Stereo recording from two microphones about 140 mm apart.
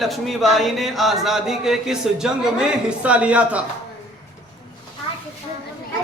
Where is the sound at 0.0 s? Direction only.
Centre (ahead or behind).